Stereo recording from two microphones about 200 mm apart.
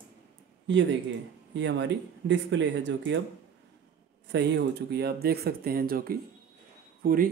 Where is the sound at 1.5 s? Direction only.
60° right (ahead or behind).